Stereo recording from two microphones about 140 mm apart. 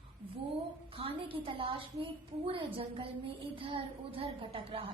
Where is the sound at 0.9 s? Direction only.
40° right (ahead or behind).